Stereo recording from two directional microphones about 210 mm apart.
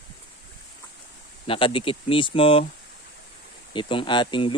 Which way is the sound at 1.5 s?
25° left (ahead or behind).